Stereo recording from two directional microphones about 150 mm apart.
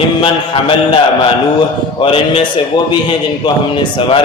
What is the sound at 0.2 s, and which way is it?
A man's voice, 35° left (ahead or behind).